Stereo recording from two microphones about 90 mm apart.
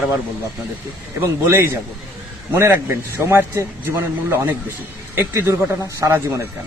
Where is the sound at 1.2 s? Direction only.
30° right (ahead or behind).